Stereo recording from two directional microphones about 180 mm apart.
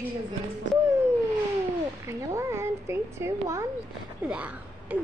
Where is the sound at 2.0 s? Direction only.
15° right (ahead or behind).